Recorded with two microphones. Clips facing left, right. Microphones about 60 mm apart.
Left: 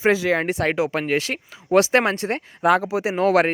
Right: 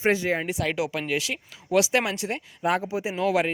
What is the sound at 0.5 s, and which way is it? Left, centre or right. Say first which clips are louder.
Speech: left 5 dB; left.